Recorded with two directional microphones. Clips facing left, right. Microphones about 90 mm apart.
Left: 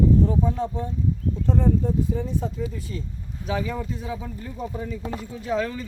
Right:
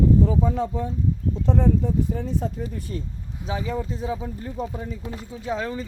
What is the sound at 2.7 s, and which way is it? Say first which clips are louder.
Speech: right 2 dB; 50° right (ahead or behind).